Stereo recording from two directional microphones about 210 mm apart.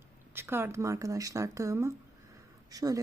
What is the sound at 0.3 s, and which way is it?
A woman's voice, 10° right (ahead or behind).